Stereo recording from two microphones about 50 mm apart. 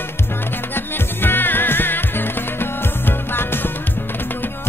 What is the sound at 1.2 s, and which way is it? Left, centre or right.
Music, left.